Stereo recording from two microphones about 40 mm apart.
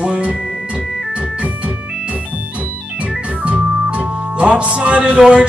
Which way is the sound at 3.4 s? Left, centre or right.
Right.